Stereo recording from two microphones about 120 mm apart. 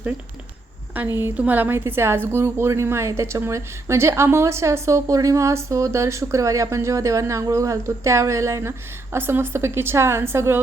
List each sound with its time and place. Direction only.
1.2 s a woman's voice: 15° right (ahead or behind)